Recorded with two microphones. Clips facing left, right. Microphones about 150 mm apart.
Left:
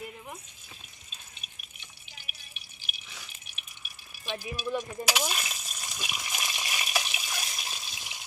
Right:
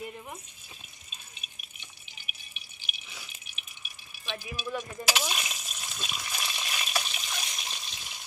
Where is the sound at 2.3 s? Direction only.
5° right (ahead or behind).